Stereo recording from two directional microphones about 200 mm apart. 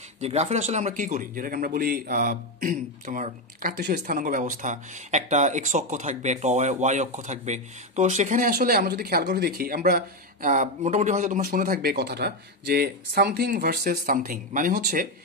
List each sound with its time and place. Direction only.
0.2 s speech: 35° right (ahead or behind)